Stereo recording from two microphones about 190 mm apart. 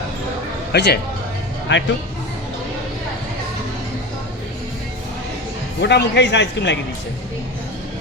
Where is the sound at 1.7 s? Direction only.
75° left (ahead or behind).